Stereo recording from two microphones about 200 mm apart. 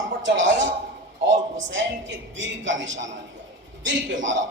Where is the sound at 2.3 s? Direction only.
65° right (ahead or behind).